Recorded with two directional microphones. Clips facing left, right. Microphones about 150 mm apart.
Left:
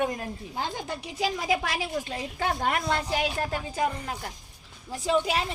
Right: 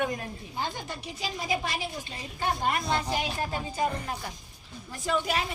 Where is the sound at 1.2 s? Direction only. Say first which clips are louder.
Left 4 dB; 90° left; by 3.8 s 70° left (ahead or behind).